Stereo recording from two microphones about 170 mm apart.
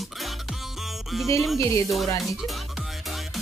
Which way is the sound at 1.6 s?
20° left (ahead or behind).